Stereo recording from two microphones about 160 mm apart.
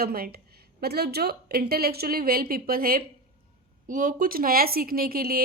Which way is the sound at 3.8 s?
55° right (ahead or behind).